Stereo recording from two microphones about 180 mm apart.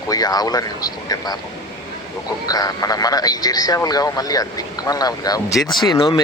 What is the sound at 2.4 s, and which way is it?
Speech, 20° left (ahead or behind).